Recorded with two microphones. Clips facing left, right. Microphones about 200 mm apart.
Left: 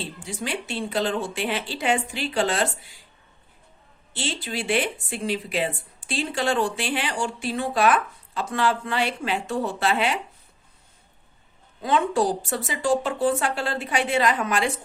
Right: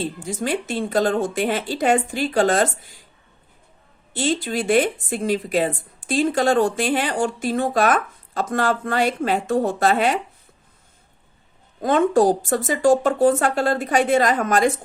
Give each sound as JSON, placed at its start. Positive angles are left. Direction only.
{"t": 0.3, "sound": "speech", "side_deg": -45}
{"t": 4.1, "sound": "speech", "side_deg": -45}
{"t": 11.8, "sound": "speech", "side_deg": -50}